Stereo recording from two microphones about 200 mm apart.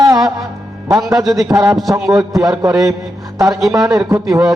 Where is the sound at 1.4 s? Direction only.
20° right (ahead or behind).